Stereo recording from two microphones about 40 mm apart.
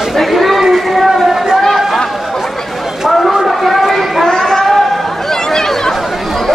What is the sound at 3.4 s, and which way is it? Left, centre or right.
Chatter, centre.